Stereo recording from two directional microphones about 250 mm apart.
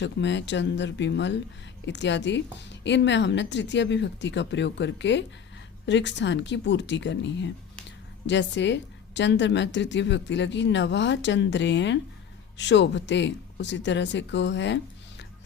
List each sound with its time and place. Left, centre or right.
0.0 s a woman's voice: left